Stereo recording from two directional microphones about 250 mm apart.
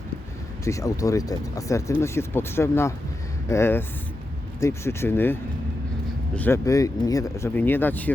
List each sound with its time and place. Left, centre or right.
0.6 s speech: centre